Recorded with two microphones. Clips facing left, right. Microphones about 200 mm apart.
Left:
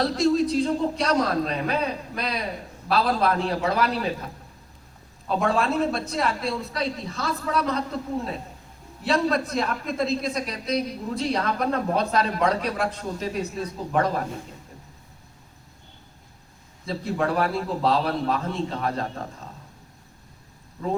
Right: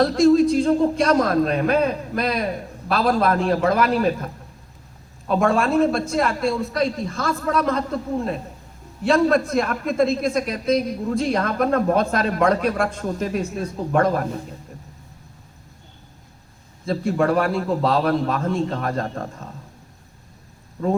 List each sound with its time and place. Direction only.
0.0 s a man's voice: 50° right (ahead or behind)
5.3 s a man's voice: 50° right (ahead or behind)
9.0 s a man's voice: 50° right (ahead or behind)
16.8 s a man's voice: 50° right (ahead or behind)